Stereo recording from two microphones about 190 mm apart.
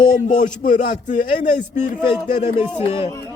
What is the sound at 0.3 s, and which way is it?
A man's voice, 40° left (ahead or behind).